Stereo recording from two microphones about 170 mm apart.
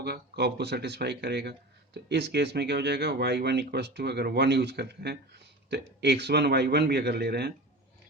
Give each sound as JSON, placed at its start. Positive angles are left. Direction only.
{"t": 0.0, "sound": "speech", "side_deg": -75}